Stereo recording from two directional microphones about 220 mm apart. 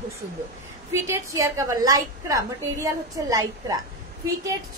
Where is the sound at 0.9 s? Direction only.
15° right (ahead or behind).